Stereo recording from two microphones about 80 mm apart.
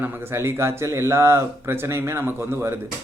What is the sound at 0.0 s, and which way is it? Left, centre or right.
Speech, right.